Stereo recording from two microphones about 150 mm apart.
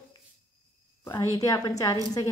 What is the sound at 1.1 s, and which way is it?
A woman's voice, 20° left (ahead or behind).